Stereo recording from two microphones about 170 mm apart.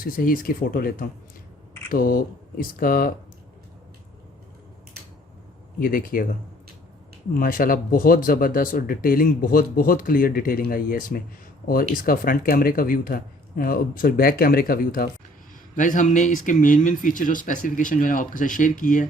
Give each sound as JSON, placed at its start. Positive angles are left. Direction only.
{"t": 0.0, "sound": "speech", "side_deg": 55}
{"t": 5.8, "sound": "speech", "side_deg": 55}
{"t": 7.3, "sound": "speech", "side_deg": 55}